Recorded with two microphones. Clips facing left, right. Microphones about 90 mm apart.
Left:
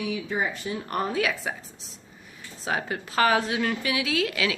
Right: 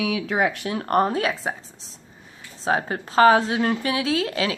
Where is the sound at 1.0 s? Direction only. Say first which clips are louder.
Right 5 dB; 40° right (ahead or behind).